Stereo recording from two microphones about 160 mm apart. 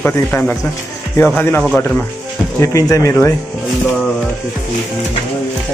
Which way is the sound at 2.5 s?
20° left (ahead or behind).